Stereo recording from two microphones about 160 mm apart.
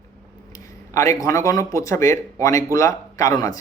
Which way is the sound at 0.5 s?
20° left (ahead or behind).